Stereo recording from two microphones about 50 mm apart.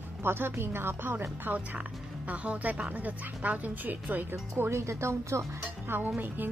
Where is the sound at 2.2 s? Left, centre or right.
Right.